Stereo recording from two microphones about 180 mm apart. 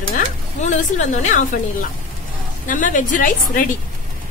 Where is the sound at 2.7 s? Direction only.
45° left (ahead or behind).